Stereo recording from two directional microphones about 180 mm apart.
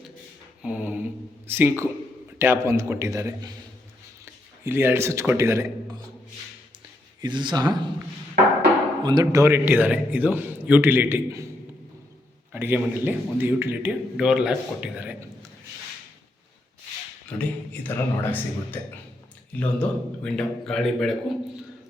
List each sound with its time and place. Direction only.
0.6 s a sound: 10° right (ahead or behind)
1.5 s a man's voice: 10° right (ahead or behind)
4.6 s a man's voice: 15° right (ahead or behind)
7.2 s speech: 25° right (ahead or behind)
9.0 s a man's voice: 20° right (ahead or behind)
12.5 s a man's voice: 10° right (ahead or behind)
17.2 s a man's voice: 10° left (ahead or behind)